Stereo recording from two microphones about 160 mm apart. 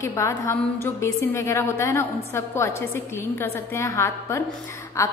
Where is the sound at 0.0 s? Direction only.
20° left (ahead or behind).